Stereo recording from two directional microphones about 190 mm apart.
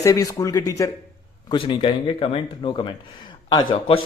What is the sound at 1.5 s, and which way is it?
Speech, 25° left (ahead or behind).